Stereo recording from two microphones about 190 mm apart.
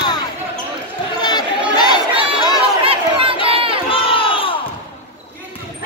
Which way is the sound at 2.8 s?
30° right (ahead or behind).